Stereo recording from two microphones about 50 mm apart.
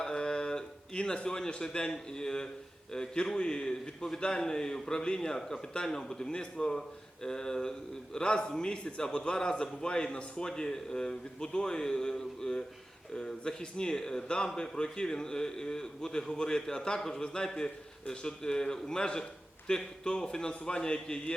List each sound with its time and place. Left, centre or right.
0.0 s a man's voice: centre